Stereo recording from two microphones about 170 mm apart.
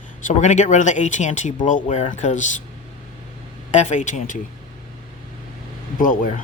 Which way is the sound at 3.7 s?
45° left (ahead or behind).